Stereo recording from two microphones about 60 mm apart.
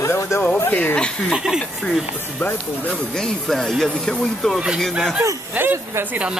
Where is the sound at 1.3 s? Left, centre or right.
Centre.